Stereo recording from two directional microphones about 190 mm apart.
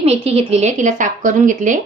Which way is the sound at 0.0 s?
30° right (ahead or behind).